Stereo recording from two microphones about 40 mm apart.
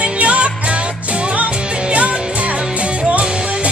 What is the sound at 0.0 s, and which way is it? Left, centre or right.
Music, right.